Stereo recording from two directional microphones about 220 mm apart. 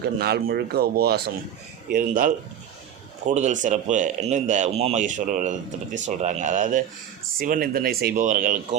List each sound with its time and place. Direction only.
0.0 s a man's voice: 45° right (ahead or behind)